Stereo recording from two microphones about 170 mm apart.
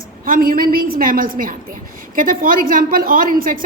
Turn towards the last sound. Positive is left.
turn(degrees=-55)  # may be behind; listen again after turning